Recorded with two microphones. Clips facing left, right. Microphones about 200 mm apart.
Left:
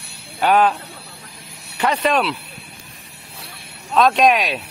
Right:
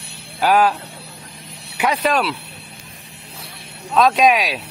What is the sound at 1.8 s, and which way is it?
Speech, centre (ahead or behind).